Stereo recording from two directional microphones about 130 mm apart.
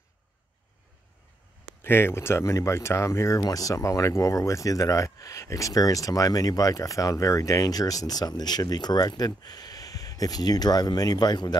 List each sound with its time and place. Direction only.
1.8 s speech: 20° left (ahead or behind)